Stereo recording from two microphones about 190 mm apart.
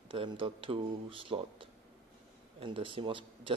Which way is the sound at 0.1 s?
25° right (ahead or behind).